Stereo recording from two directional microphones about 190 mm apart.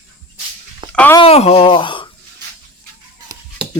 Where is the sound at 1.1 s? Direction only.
30° left (ahead or behind).